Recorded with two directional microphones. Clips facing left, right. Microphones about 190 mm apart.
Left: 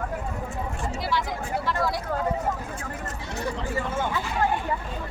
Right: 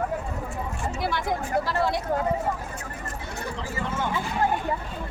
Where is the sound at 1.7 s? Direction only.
30° right (ahead or behind).